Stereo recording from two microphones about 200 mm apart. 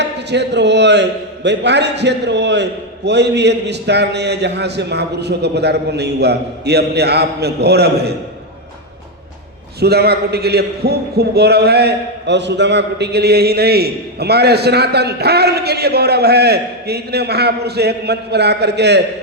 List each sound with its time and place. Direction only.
0.0 s a man's voice: 60° right (ahead or behind)
9.8 s a man's voice: 55° right (ahead or behind)